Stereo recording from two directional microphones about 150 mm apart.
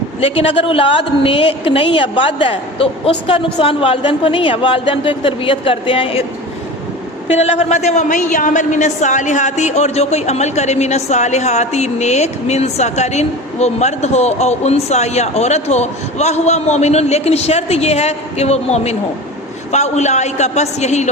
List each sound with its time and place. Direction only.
0.2 s a woman's voice: 40° left (ahead or behind)
7.3 s a man's voice: 45° left (ahead or behind)